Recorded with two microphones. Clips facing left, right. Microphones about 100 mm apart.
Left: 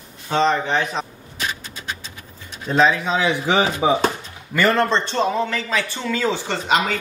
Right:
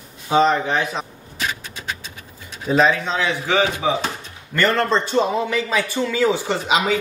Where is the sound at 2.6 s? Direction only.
5° right (ahead or behind).